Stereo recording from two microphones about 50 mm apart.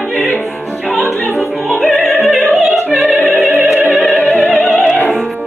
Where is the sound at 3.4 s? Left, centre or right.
Right.